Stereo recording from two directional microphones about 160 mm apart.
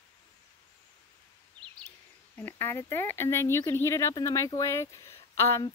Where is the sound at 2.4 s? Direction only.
10° left (ahead or behind).